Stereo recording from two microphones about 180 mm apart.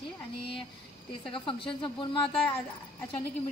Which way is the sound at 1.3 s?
30° left (ahead or behind).